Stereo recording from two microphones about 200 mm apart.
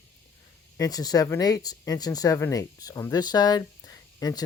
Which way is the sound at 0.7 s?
20° left (ahead or behind).